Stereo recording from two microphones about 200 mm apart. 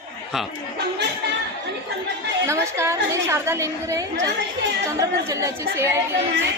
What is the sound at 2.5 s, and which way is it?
A woman's voice, 15° right (ahead or behind).